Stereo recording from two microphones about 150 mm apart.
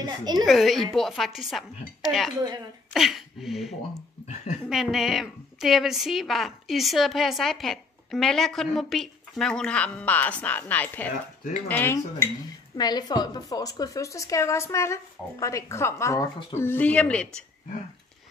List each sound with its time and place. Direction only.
0.0 s a woman's voice: 25° right (ahead or behind)
0.5 s a woman's voice: centre (ahead or behind)
2.4 s a woman's voice: 30° right (ahead or behind)
2.9 s a woman's voice: centre (ahead or behind); by 12.3 s 15° left (ahead or behind)
12.7 s a woman's voice: 25° left (ahead or behind); by 17.5 s 5° left (ahead or behind)